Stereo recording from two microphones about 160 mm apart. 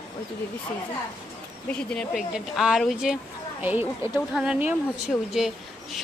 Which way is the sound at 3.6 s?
10° right (ahead or behind).